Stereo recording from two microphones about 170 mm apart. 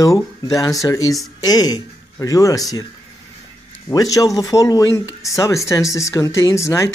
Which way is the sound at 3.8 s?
20° left (ahead or behind).